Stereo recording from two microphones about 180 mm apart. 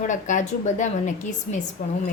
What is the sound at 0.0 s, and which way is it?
A woman's voice, 45° left (ahead or behind).